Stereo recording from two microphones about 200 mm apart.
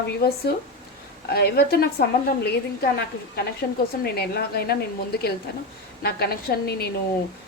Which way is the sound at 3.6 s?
50° left (ahead or behind).